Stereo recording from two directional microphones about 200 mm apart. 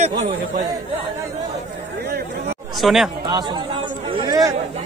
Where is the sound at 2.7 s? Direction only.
Centre (ahead or behind).